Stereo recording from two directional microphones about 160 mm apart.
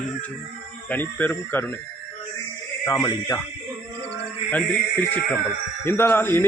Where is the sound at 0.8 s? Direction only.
10° left (ahead or behind).